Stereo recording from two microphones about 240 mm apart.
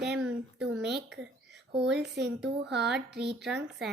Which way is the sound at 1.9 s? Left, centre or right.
Right.